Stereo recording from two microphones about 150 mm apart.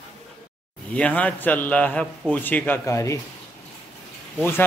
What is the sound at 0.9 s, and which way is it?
A man's voice, 10° left (ahead or behind).